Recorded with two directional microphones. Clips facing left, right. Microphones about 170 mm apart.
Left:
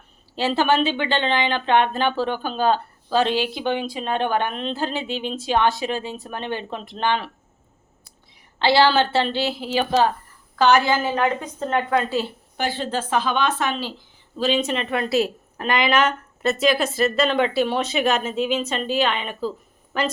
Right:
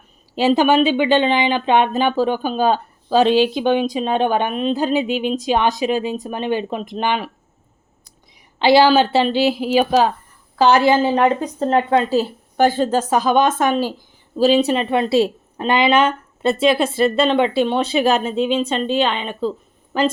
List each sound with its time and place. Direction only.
0.3 s speech: 15° right (ahead or behind)
8.5 s speech: 15° right (ahead or behind)
10.6 s a woman's voice: 30° right (ahead or behind)
12.0 s a woman's voice: 40° right (ahead or behind)